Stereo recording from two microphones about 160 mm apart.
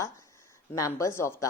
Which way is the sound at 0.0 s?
20° left (ahead or behind).